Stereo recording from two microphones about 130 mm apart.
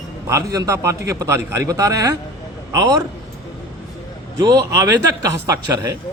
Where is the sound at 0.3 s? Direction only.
25° right (ahead or behind).